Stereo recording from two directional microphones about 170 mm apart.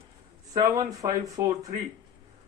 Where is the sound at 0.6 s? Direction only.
20° right (ahead or behind).